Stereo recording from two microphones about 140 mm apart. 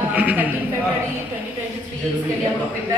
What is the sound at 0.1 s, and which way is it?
Speech, 10° right (ahead or behind).